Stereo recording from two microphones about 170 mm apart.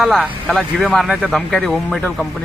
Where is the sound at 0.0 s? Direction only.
Centre (ahead or behind).